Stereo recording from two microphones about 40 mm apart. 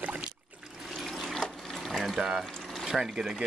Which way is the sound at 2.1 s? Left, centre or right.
Centre.